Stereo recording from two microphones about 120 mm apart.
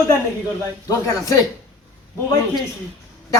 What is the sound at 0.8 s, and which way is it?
Speech, 25° left (ahead or behind).